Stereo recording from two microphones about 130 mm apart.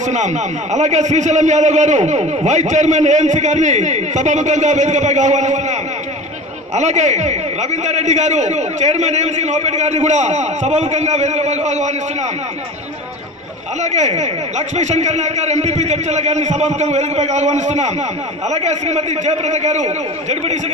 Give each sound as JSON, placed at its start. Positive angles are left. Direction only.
{"t": 0.0, "sound": "a man's voice", "side_deg": -65}
{"t": 13.9, "sound": "a man's voice", "side_deg": -65}